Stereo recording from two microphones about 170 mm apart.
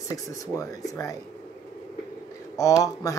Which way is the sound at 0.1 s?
20° left (ahead or behind).